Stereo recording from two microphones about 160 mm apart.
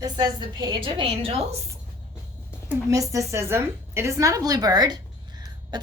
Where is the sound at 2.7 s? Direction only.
20° right (ahead or behind).